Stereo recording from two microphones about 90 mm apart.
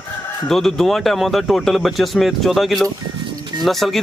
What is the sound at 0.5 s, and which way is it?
A man's voice, 5° left (ahead or behind).